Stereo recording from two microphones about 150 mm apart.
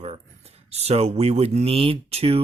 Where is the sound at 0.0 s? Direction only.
40° right (ahead or behind).